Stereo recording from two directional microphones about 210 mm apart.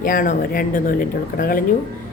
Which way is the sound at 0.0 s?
40° left (ahead or behind).